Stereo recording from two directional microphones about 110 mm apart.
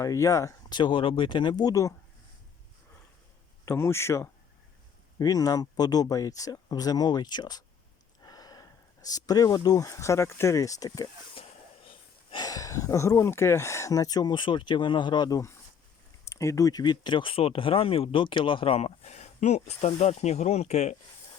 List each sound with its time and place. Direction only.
0.0 s speech: 30° left (ahead or behind)
0.8 s speech: 50° left (ahead or behind); by 1.9 s 35° left (ahead or behind)
3.7 s speech: 25° left (ahead or behind)
11.9 s gasp: 50° left (ahead or behind)
12.5 s speech: 30° left (ahead or behind); by 20.9 s 90° left